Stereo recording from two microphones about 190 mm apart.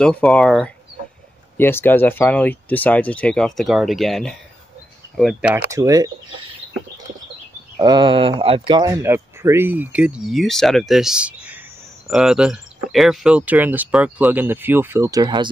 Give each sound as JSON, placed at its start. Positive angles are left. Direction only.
{"t": 0.0, "sound": "speech", "side_deg": 5}
{"t": 5.7, "sound": "speech", "side_deg": -20}
{"t": 7.8, "sound": "speech", "side_deg": -25}